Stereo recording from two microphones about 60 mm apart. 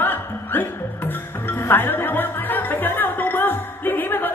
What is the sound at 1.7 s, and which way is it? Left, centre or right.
Music, left.